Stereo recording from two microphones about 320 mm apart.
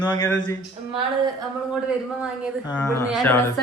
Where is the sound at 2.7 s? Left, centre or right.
Centre.